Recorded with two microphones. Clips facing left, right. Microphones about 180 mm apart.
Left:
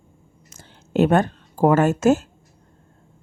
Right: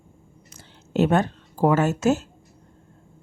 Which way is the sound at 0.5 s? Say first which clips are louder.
Left 3 dB; 50° left (ahead or behind).